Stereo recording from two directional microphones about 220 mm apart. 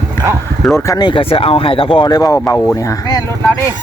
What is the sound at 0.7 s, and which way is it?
Speech, 15° left (ahead or behind).